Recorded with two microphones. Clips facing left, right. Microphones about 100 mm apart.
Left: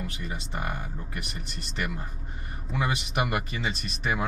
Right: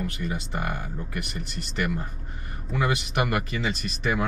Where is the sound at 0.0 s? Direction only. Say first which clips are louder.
Right 5 dB; centre (ahead or behind).